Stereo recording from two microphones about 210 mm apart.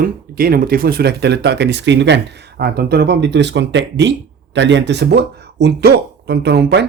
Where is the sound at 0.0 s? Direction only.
45° right (ahead or behind).